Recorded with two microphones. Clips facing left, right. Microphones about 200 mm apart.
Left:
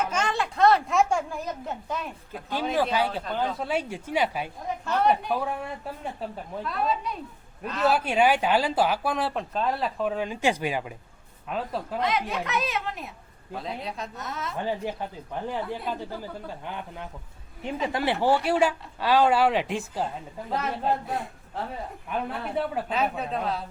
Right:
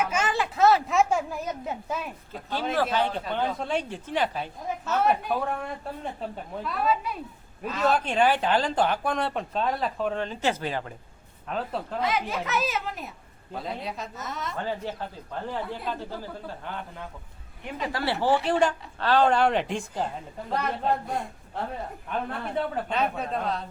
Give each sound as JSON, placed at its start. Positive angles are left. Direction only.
{"t": 0.0, "sound": "a sound", "side_deg": -5}
{"t": 2.9, "sound": "speech", "side_deg": 5}
{"t": 4.9, "sound": "speech", "side_deg": -5}
{"t": 14.6, "sound": "speech", "side_deg": 15}
{"t": 17.7, "sound": "speech", "side_deg": 20}